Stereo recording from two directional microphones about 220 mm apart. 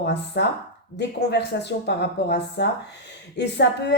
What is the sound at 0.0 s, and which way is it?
A woman's voice, 50° left (ahead or behind).